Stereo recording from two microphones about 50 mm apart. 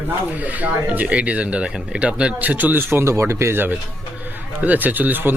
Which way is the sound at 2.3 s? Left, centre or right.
Right.